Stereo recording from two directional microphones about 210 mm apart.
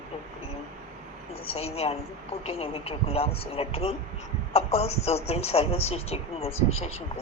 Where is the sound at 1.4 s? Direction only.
30° left (ahead or behind).